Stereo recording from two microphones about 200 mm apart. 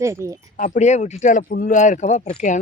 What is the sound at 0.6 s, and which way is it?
Speech, 40° left (ahead or behind).